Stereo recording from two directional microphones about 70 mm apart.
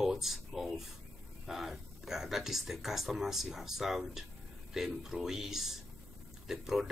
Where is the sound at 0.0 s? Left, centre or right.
Centre.